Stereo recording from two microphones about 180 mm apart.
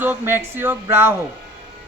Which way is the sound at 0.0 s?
10° right (ahead or behind).